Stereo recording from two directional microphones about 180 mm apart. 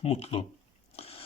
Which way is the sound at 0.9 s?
35° left (ahead or behind).